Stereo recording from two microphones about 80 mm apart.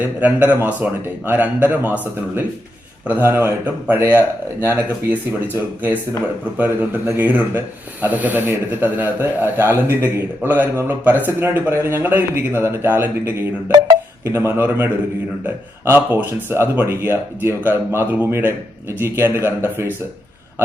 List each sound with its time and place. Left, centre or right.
0.0 s speech: centre
6.6 s a man's voice: right